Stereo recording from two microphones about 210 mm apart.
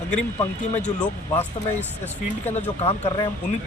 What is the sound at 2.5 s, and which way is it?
Speech, 30° left (ahead or behind).